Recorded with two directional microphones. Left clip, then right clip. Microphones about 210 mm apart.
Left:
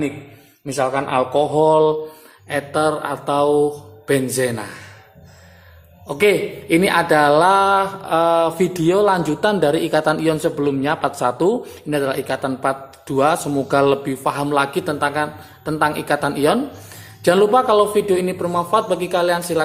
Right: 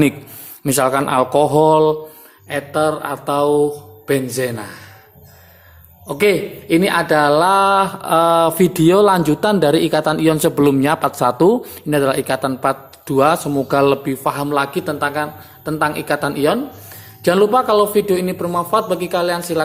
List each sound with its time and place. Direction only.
0.6 s a man's voice: 35° right (ahead or behind); by 4.9 s 10° right (ahead or behind)
6.1 s a man's voice: 15° right (ahead or behind)